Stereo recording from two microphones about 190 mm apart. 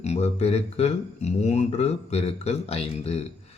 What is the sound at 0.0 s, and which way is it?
A man's voice, 35° left (ahead or behind).